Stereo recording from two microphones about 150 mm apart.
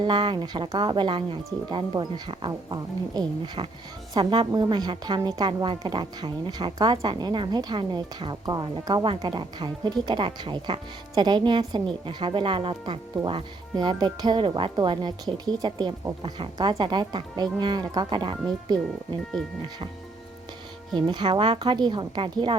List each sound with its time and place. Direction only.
0.0 s a woman's voice: 30° right (ahead or behind)
20.9 s a woman's voice: 30° right (ahead or behind)